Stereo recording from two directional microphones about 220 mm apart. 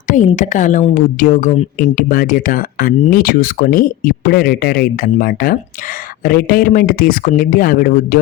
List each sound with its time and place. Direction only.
0.3 s speech: 35° left (ahead or behind)